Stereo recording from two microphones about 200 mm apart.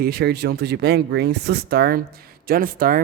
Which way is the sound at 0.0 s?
55° right (ahead or behind).